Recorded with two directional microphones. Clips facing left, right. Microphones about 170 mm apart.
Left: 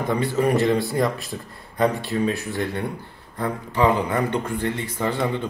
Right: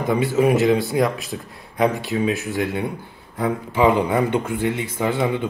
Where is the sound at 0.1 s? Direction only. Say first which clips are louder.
Right 4 dB; 5° right (ahead or behind).